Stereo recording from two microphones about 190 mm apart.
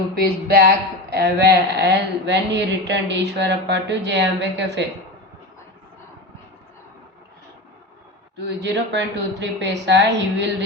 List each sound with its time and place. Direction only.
0.3 s a woman's voice: 55° right (ahead or behind)
8.4 s a woman's voice: 65° right (ahead or behind)